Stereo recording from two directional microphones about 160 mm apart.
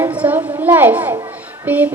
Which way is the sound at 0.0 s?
10° right (ahead or behind).